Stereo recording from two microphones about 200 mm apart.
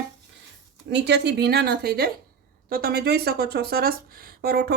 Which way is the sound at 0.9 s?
60° right (ahead or behind).